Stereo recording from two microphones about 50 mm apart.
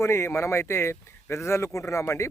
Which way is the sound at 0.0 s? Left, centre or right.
Left.